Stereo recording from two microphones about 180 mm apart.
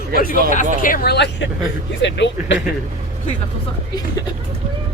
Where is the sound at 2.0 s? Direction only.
80° left.